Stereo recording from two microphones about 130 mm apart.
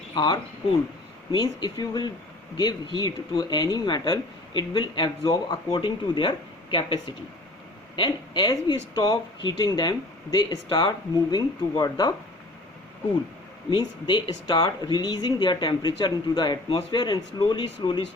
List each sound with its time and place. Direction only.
0.1 s speech: 35° left (ahead or behind)
13.7 s speech: 35° left (ahead or behind)